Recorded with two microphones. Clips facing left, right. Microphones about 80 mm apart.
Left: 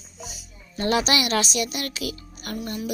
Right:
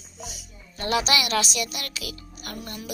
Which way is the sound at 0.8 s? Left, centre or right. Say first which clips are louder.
Left 2 dB; left.